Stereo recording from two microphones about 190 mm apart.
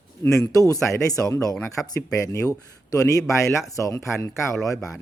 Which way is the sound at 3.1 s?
15° left (ahead or behind).